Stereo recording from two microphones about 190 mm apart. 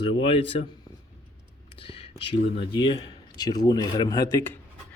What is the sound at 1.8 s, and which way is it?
Speech, 25° left (ahead or behind).